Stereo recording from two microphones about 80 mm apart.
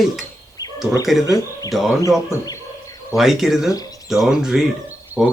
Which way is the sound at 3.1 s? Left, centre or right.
Centre.